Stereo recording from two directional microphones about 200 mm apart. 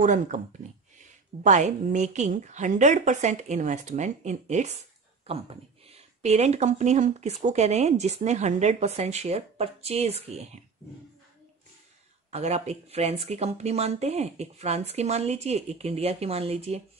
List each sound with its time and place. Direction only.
0.0 s speech: 40° right (ahead or behind)
12.3 s speech: 35° right (ahead or behind)